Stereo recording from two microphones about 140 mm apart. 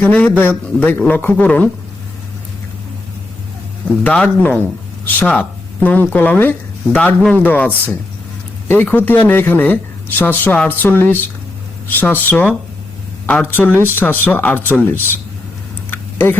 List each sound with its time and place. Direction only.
0.0 s speech: 10° left (ahead or behind)
4.0 s speech: 10° left (ahead or behind)
13.7 s speech: 15° right (ahead or behind)
13.9 s speech: 15° left (ahead or behind)
15.9 s a sound: 15° left (ahead or behind)